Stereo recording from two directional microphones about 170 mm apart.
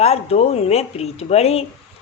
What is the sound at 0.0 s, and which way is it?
Speech, 40° left (ahead or behind).